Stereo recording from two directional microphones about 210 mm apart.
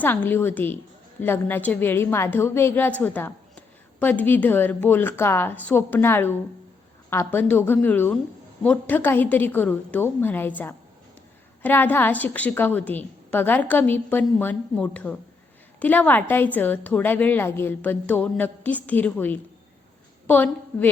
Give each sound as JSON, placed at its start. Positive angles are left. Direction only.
{"t": 0.0, "sound": "a woman's voice", "side_deg": 10}